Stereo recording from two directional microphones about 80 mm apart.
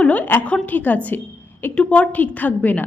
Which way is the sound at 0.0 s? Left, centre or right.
Centre.